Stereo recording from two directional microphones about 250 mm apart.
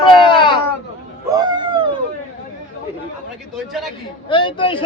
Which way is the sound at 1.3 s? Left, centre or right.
Centre.